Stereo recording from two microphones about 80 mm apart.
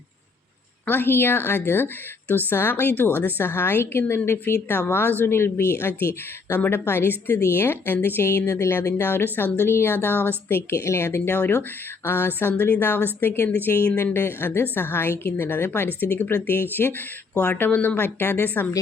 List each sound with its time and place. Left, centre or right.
0.9 s a woman's voice: left
10.7 s a woman's voice: left